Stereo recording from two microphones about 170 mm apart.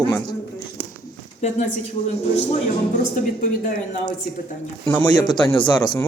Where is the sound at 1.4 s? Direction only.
45° left (ahead or behind).